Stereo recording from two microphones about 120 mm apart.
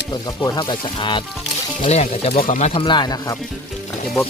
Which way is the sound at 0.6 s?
40° left (ahead or behind).